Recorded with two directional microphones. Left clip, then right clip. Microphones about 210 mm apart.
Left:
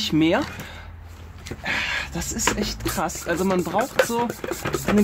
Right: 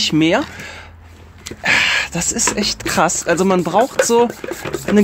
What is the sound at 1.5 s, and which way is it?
Speech, 40° right (ahead or behind).